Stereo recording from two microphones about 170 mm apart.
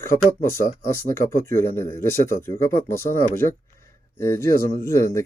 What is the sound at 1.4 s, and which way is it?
Speech, 15° left (ahead or behind).